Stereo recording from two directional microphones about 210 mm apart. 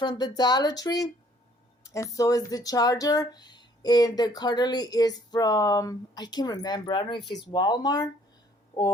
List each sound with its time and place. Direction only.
0.0 s speech: 20° left (ahead or behind)